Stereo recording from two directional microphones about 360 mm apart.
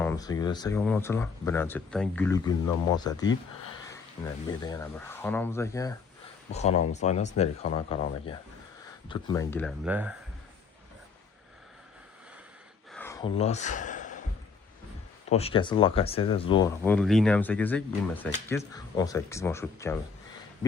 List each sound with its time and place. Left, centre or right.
0.0 s speech: centre
4.4 s speech: centre
12.9 s a sound: centre
15.3 s speech: centre